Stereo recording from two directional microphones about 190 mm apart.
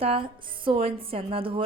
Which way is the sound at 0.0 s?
30° right (ahead or behind).